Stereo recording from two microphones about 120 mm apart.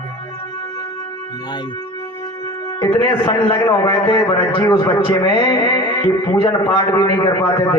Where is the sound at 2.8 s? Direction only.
20° left (ahead or behind).